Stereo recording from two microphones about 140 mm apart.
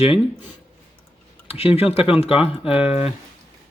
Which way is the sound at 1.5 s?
45° left (ahead or behind).